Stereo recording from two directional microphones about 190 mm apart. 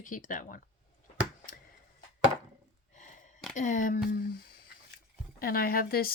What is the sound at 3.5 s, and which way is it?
Speech, 40° left (ahead or behind).